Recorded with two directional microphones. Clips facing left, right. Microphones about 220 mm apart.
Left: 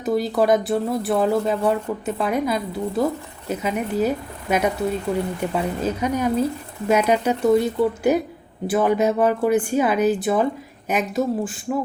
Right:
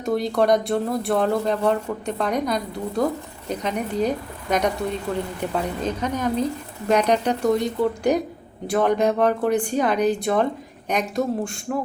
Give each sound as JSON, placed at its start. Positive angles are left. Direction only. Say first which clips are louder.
{"t": 0.0, "sound": "speech", "louder": "left 1 dB", "side_deg": 0}